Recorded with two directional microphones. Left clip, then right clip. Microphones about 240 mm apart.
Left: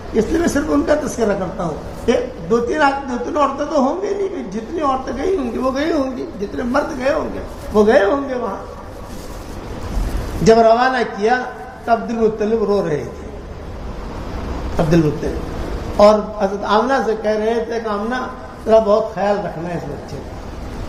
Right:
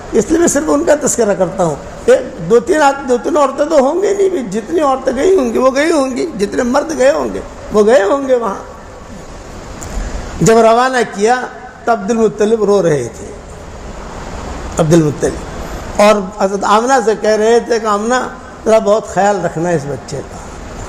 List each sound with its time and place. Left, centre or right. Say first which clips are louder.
0.2 s speech: right 5 dB; right
10.4 s speech: right 3 dB; right
16.0 s speech: right 2 dB; right